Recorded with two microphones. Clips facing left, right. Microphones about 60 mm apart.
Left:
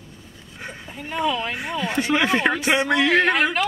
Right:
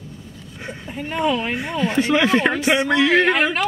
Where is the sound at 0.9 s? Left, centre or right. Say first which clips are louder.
Right 3 dB; centre.